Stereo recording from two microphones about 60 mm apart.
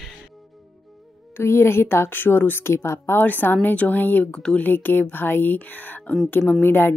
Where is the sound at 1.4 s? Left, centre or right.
Left.